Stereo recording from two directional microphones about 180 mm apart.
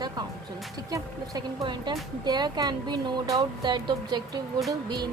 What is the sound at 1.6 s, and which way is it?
Speech, 25° right (ahead or behind).